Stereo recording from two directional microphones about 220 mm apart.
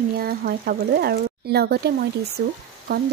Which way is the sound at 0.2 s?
45° right (ahead or behind).